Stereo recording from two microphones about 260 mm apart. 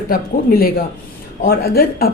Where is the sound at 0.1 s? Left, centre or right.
Left.